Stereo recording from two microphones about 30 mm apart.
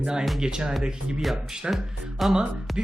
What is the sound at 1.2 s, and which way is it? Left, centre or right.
Speech, centre.